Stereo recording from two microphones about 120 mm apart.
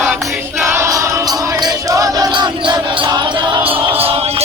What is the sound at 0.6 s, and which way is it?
Music, 20° right (ahead or behind).